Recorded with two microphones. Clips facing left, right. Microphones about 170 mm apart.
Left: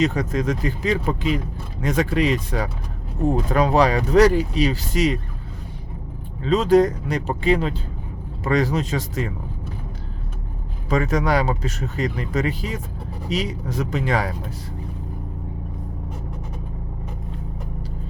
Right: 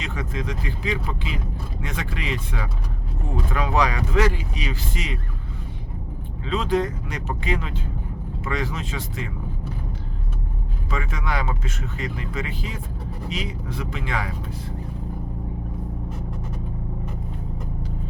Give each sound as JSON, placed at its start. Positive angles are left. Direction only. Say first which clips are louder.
{"t": 0.0, "sound": "speech", "louder": "left 9 dB", "side_deg": 40}
{"t": 6.4, "sound": "speech", "louder": "left 7 dB", "side_deg": 40}
{"t": 10.8, "sound": "speech", "louder": "left 9 dB", "side_deg": 40}